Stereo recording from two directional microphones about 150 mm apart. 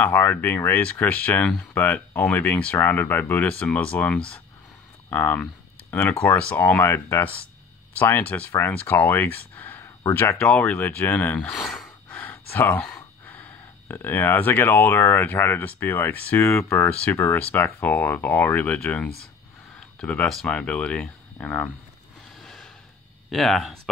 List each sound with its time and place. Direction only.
0.0 s speech: 10° left (ahead or behind)
22.4 s snort: centre (ahead or behind)
23.3 s speech: centre (ahead or behind)